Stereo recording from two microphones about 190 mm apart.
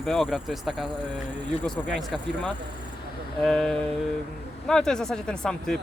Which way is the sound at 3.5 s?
Centre (ahead or behind).